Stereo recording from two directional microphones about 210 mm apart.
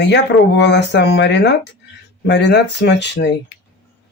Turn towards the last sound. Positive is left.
turn(degrees=55)  # may be behind; listen again after turning